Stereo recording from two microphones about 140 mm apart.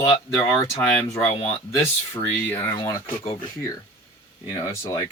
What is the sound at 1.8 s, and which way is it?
Speech, 15° left (ahead or behind).